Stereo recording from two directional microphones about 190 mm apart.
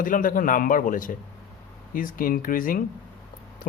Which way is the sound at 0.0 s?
45° left (ahead or behind).